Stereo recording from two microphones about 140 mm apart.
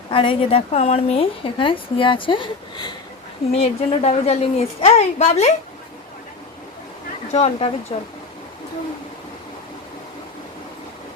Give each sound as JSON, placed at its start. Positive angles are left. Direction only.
{"t": 0.1, "sound": "a woman's voice", "side_deg": 40}
{"t": 3.6, "sound": "a woman's voice", "side_deg": 50}
{"t": 7.3, "sound": "a woman's voice", "side_deg": 50}